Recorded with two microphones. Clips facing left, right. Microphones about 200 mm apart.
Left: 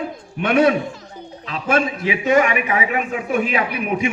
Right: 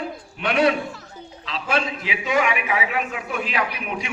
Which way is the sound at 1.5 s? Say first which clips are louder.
Left 5 dB; 50° left (ahead or behind).